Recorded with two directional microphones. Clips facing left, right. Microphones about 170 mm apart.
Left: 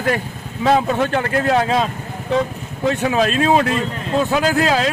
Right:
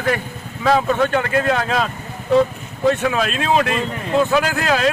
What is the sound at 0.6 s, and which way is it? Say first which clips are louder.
Speech: even; 30° left (ahead or behind).